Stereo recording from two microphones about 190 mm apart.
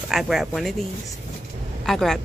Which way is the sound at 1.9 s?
Centre (ahead or behind).